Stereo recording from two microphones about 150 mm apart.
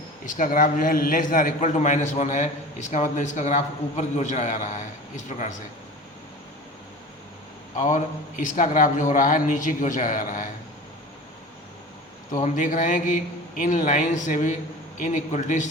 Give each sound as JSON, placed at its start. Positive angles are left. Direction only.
{"t": 0.3, "sound": "a man's voice", "side_deg": 60}
{"t": 7.8, "sound": "a man's voice", "side_deg": 55}
{"t": 12.4, "sound": "a man's voice", "side_deg": 55}